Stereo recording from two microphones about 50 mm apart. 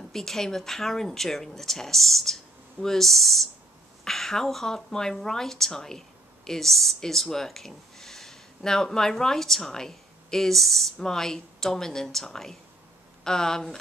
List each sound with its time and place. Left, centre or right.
0.1 s a woman's voice: centre